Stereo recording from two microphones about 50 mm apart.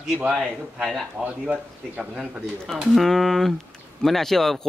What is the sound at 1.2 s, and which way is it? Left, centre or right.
Speech, centre.